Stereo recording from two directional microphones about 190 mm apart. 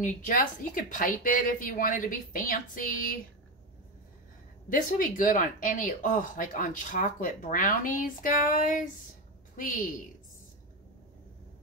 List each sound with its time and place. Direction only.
0.0 s speech: 45° left (ahead or behind)
4.6 s speech: 45° left (ahead or behind)